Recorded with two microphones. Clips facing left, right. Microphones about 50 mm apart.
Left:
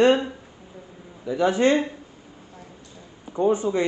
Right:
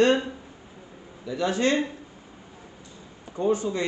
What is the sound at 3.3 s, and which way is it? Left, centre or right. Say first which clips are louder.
Speech: left 4 dB; left.